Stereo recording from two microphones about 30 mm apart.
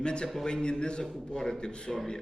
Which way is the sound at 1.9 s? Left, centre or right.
Centre.